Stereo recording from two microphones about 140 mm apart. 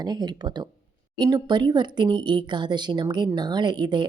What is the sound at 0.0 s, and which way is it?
Speech, 30° right (ahead or behind).